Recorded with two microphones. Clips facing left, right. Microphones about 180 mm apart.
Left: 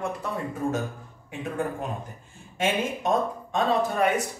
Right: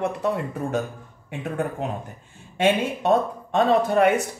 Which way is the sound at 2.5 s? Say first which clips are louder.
Right 5 dB; 65° right (ahead or behind).